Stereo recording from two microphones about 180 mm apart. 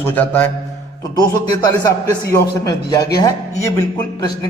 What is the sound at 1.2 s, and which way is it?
Speech, 20° left (ahead or behind).